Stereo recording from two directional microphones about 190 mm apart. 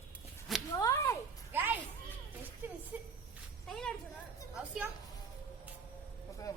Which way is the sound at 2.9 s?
10° right (ahead or behind).